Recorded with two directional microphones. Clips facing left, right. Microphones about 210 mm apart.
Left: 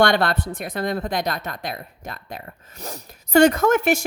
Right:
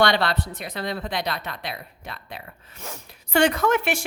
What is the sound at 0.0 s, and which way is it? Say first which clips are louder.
A woman's voice: left 3 dB; 50° left (ahead or behind).